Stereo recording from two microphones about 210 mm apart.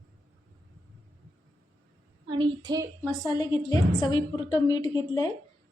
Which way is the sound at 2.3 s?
25° right (ahead or behind).